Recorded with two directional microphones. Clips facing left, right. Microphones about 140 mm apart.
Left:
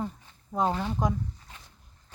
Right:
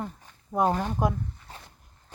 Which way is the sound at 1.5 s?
35° right (ahead or behind).